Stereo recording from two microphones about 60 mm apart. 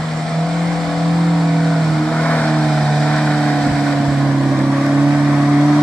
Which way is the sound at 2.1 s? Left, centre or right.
Centre.